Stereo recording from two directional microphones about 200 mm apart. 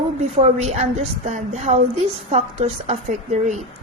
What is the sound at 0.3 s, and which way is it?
A woman's voice, 35° right (ahead or behind).